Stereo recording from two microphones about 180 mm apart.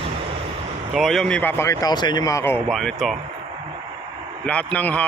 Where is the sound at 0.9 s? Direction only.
Centre (ahead or behind).